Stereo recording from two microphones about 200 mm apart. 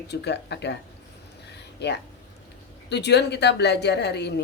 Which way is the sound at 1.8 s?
55° left (ahead or behind).